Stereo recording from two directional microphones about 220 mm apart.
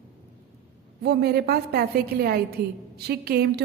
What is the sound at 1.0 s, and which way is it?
A woman's voice, 45° right (ahead or behind).